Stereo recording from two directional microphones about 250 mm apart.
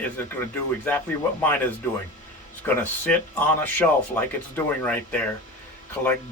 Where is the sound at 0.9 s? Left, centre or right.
Centre.